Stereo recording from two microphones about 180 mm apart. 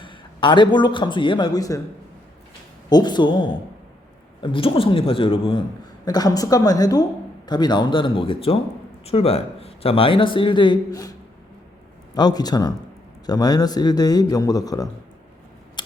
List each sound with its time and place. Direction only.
0.0 s a man's voice: 25° left (ahead or behind)
2.9 s a man's voice: 25° left (ahead or behind)
12.1 s a man's voice: 20° left (ahead or behind)